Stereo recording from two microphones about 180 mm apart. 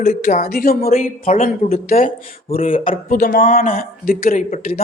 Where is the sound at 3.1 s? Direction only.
55° left (ahead or behind).